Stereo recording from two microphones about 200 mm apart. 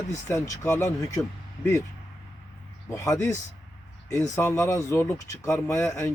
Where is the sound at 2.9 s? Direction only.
15° left (ahead or behind).